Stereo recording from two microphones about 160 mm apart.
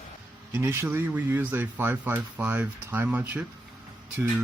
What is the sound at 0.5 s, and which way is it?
A man's voice, 15° right (ahead or behind).